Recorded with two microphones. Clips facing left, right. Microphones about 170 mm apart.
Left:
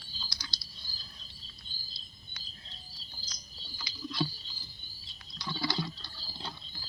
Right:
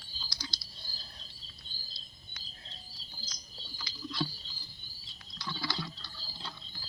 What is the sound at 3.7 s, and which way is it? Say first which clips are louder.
Rowboat: left 2 dB; 10° left (ahead or behind).